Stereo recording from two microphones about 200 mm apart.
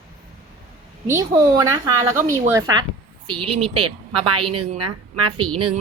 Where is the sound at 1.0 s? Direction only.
15° right (ahead or behind).